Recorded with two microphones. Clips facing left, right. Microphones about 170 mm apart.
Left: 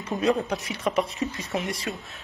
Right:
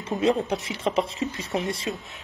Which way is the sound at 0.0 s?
25° right (ahead or behind).